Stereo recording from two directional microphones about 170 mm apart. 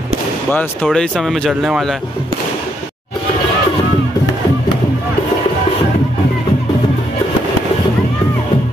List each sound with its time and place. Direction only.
0.8 s speech: centre (ahead or behind)